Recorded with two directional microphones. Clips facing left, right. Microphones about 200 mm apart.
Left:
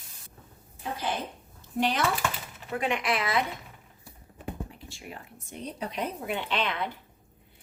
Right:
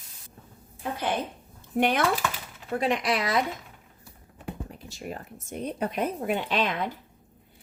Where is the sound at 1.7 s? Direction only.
55° right (ahead or behind).